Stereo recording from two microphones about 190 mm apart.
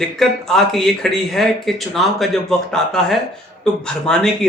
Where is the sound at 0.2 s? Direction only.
Centre (ahead or behind).